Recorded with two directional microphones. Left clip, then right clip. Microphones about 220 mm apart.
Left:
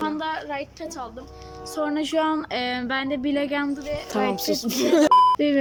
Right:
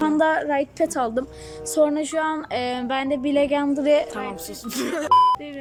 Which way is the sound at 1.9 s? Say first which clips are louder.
Left 1 dB; centre (ahead or behind).